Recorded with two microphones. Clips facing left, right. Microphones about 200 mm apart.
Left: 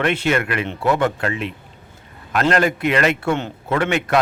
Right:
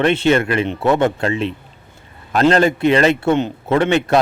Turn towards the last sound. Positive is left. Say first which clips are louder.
# right 4 dB
turn(degrees=-30)  # may be behind; listen again after turning